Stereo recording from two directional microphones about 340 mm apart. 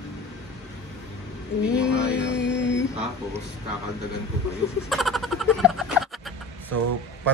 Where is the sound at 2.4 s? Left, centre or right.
Left.